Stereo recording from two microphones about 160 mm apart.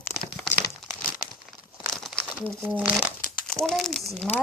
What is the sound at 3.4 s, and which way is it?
Speech, 5° left (ahead or behind).